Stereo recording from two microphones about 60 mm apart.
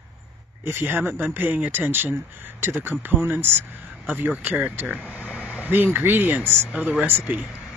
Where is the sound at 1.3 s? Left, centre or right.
Right.